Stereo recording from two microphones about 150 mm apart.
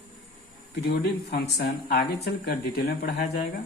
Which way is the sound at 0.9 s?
90° left.